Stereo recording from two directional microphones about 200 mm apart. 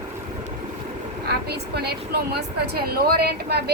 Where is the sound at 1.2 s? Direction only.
55° right (ahead or behind).